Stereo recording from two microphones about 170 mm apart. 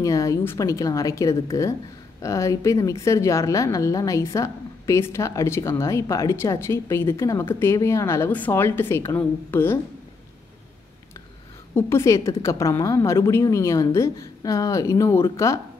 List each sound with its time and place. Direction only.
0.0 s a woman's voice: 20° left (ahead or behind)
11.7 s a woman's voice: 15° left (ahead or behind)